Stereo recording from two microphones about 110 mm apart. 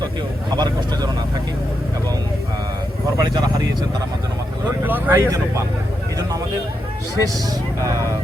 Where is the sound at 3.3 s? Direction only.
35° right (ahead or behind).